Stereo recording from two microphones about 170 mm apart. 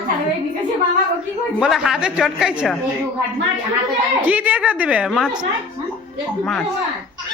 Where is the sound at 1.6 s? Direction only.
Centre (ahead or behind).